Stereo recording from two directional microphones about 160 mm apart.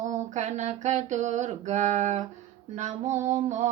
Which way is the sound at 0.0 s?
50° right (ahead or behind).